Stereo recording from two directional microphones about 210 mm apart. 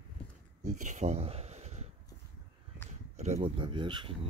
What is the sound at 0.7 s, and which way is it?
Speech, 35° right (ahead or behind).